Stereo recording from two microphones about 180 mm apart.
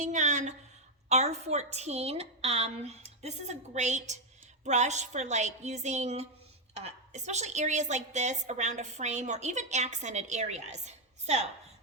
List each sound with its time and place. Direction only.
0.0 s a woman's voice: 40° right (ahead or behind)